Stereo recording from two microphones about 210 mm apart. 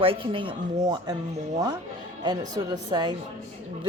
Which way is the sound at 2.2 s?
20° right (ahead or behind).